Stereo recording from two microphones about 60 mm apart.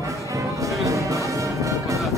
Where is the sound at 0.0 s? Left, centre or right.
Right.